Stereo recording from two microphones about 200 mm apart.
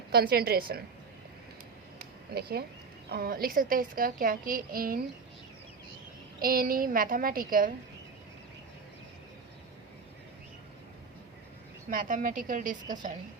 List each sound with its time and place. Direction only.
0.1 s a woman's voice: 50° right (ahead or behind)
2.3 s a woman's voice: 50° right (ahead or behind)
6.4 s a woman's voice: 45° right (ahead or behind)
11.9 s a woman's voice: 40° right (ahead or behind)